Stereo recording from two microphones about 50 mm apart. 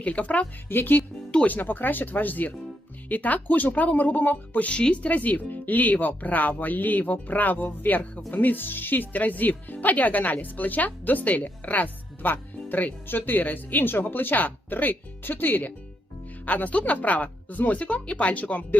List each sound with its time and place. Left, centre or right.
0.0 s speech: left
0.7 s speech: left
0.9 s music: left
1.5 s speech: left